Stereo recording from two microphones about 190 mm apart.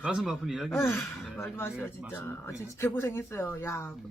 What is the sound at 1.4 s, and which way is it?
Speech, 10° left (ahead or behind).